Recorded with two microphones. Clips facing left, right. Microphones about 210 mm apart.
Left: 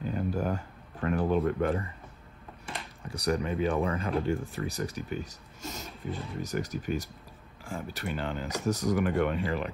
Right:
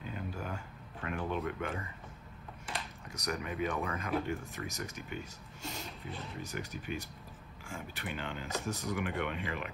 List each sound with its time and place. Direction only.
0.1 s a sound: 40° left (ahead or behind)
1.0 s speech: 45° left (ahead or behind)
3.1 s speech: 30° left (ahead or behind)